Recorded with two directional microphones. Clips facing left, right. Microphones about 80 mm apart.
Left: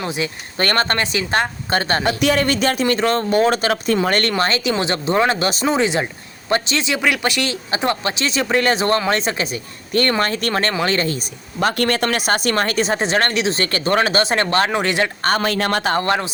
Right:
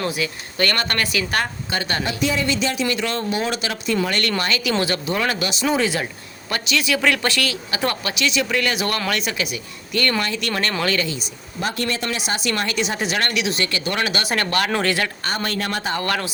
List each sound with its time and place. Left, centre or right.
0.0 s speech: left
1.7 s speech: left
2.0 s speech: left
2.8 s speech: left
5.6 s speech: left
7.0 s speech: centre; by 11.3 s left
11.6 s speech: left
15.3 s speech: left
16.0 s speech: left